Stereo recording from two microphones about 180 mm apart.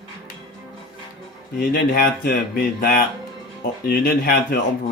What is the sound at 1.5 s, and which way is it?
Speech, 55° left (ahead or behind).